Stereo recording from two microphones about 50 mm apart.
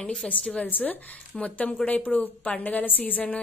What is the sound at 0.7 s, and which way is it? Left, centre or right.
A woman's voice, left.